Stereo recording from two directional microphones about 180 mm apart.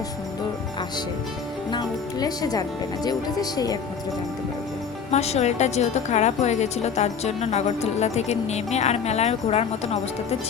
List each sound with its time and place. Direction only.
1.7 s speech: 20° left (ahead or behind)
5.1 s a woman's voice: 35° left (ahead or behind)